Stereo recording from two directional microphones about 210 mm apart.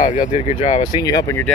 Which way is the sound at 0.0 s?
40° left (ahead or behind).